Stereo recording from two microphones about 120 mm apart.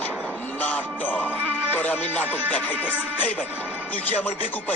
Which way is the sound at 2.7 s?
10° right (ahead or behind).